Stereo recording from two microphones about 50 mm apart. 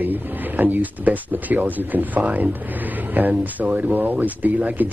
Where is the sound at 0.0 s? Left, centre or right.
Right.